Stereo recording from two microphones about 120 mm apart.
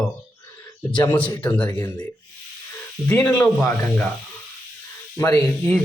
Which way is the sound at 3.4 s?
25° left (ahead or behind).